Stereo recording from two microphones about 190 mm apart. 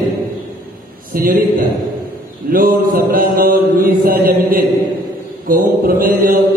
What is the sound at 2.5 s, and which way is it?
Mantra, 50° right (ahead or behind).